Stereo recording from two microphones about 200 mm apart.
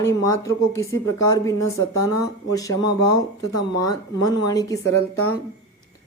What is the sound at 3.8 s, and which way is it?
Speech, 20° left (ahead or behind).